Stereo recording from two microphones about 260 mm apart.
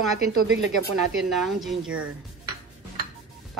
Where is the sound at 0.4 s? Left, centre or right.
Right.